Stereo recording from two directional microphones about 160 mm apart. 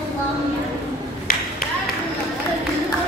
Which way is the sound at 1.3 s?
70° left (ahead or behind).